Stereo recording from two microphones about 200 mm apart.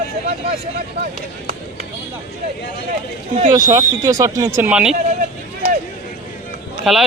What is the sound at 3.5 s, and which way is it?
Speech, 15° right (ahead or behind).